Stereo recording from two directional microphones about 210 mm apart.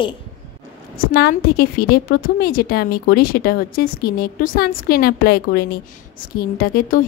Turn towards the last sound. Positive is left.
turn(degrees=45)  # may be behind; listen again after turning